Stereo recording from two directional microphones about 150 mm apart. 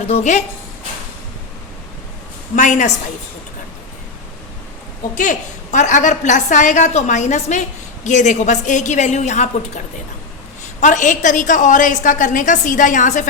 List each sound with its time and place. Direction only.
0.1 s a woman's voice: 50° left (ahead or behind)
2.6 s a woman's voice: 55° left (ahead or behind)
5.1 s a woman's voice: 55° left (ahead or behind)